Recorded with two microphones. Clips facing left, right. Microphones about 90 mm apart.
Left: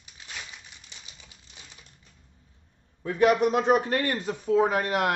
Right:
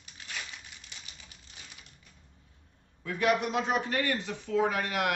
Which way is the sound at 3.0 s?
40° left (ahead or behind).